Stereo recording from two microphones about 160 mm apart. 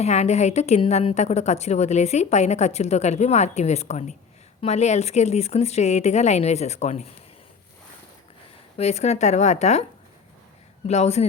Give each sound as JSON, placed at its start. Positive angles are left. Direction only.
{"t": 0.0, "sound": "a woman's voice", "side_deg": 45}
{"t": 8.8, "sound": "a woman's voice", "side_deg": 40}
{"t": 10.8, "sound": "a woman's voice", "side_deg": 45}